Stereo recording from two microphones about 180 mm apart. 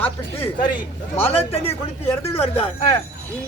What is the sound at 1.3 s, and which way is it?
Speech, 35° left (ahead or behind).